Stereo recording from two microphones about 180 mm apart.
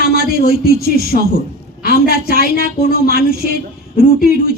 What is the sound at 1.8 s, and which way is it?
A woman's voice, 55° left (ahead or behind).